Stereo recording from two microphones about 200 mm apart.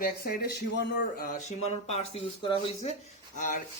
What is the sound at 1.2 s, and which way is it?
Speech, 40° left (ahead or behind).